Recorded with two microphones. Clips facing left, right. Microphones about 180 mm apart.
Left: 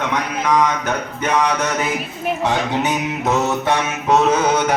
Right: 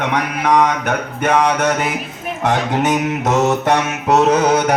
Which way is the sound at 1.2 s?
60° right (ahead or behind).